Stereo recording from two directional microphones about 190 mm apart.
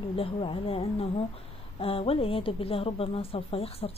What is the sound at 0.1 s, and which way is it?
A woman's voice, 30° left (ahead or behind).